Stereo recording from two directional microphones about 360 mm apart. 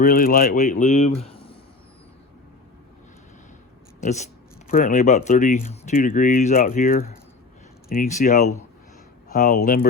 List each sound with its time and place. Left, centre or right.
0.0 s speech: left
4.0 s speech: centre